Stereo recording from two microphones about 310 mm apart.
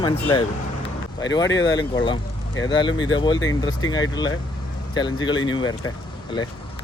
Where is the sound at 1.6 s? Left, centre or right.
Centre.